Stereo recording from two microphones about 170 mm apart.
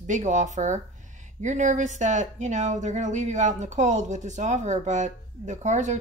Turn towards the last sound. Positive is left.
turn(degrees=-45)  # may be behind; listen again after turning